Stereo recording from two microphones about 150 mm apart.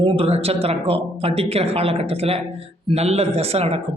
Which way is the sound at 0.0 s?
40° right (ahead or behind).